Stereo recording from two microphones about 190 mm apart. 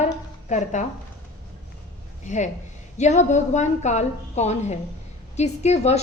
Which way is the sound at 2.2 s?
40° left (ahead or behind).